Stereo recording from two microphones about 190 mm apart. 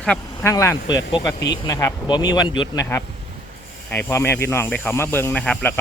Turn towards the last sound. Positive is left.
turn(degrees=5)  # may be behind; listen again after turning